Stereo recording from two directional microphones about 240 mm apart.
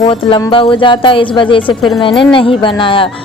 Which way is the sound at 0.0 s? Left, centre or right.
Left.